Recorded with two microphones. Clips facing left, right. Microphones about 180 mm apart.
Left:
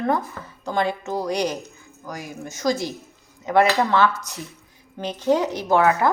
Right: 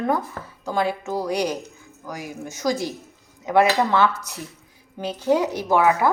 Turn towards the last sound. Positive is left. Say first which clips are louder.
# even
turn(degrees=-10)  # may be behind; listen again after turning